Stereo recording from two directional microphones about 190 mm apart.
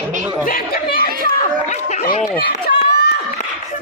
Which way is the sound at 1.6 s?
40° left (ahead or behind).